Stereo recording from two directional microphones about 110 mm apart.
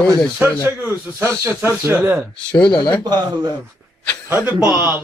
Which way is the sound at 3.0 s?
35° right (ahead or behind).